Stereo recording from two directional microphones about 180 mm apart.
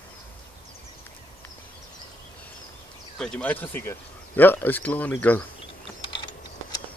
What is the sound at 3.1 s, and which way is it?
Speech, 5° left (ahead or behind).